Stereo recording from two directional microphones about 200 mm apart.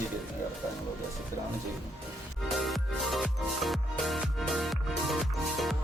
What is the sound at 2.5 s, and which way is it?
Music, centre (ahead or behind).